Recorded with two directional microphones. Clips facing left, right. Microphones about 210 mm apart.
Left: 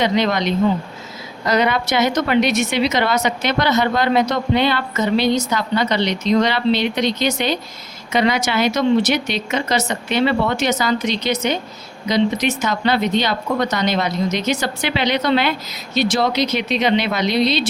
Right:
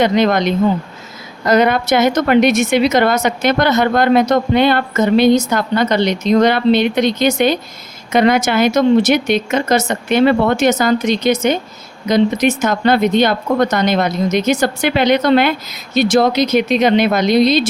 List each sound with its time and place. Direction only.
0.0 s a woman's voice: 50° right (ahead or behind)